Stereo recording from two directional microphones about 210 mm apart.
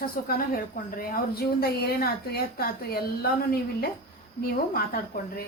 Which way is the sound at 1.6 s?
50° left (ahead or behind).